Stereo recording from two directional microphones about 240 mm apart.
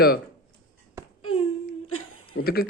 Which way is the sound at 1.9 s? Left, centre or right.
Left.